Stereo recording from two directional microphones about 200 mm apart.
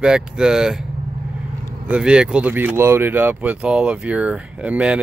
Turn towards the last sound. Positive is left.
turn(degrees=-5)  # may be behind; listen again after turning